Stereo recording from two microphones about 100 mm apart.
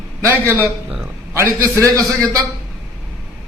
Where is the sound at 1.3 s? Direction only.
25° right (ahead or behind).